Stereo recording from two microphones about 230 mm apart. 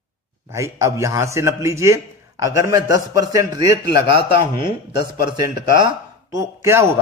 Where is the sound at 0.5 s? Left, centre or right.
Centre.